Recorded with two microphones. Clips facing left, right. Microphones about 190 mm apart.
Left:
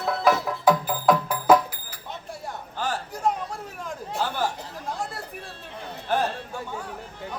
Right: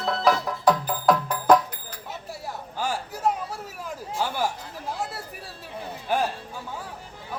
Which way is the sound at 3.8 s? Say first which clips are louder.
Even; 10° right (ahead or behind).